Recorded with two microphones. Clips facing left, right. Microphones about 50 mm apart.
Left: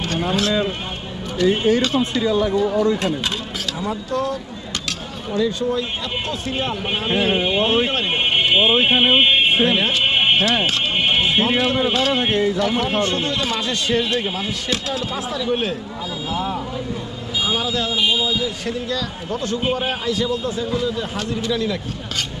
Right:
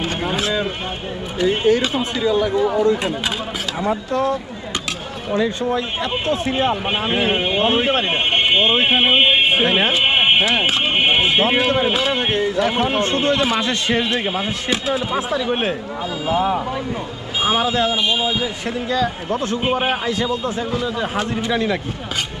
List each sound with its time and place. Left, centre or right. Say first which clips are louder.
0.0 s vehicle: left 1 dB; centre
1.4 s speech: even; centre
3.8 s speech: right 4 dB; right
9.6 s a sound: right 1 dB; right
12.5 s speech: right 2 dB; right
14.7 s speech: right 5 dB; right
17.9 s speech: even; right